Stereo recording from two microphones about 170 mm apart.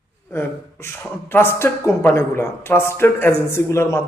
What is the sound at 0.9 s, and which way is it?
Speech, 15° left (ahead or behind).